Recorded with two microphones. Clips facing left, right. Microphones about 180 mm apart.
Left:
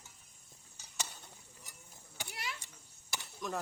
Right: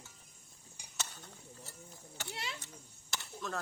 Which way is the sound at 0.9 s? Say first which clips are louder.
Even; 15° left (ahead or behind).